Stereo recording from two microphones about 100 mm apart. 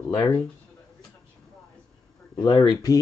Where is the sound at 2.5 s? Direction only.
55° left (ahead or behind).